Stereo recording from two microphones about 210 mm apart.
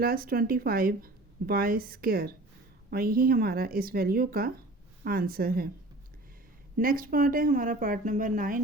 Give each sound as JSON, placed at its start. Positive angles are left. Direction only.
{"t": 0.0, "sound": "a woman's voice", "side_deg": -45}
{"t": 6.7, "sound": "a woman's voice", "side_deg": -40}